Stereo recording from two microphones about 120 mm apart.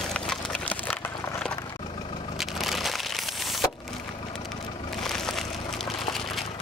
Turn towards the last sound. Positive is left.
turn(degrees=5)  # may be behind; listen again after turning